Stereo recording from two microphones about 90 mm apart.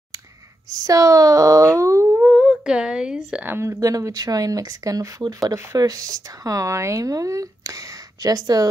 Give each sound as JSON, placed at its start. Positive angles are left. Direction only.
{"t": 0.7, "sound": "speech", "side_deg": -40}
{"t": 2.3, "sound": "a woman's voice", "side_deg": -5}
{"t": 3.4, "sound": "speech", "side_deg": -30}